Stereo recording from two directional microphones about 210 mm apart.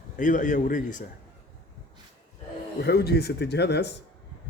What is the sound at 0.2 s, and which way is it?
Speech, 35° left (ahead or behind).